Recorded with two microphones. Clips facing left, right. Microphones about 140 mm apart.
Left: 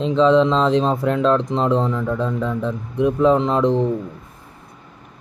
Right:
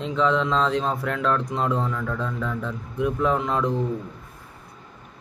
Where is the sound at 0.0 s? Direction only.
20° left (ahead or behind).